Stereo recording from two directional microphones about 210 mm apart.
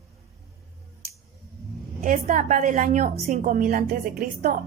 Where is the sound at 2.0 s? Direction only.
35° right (ahead or behind).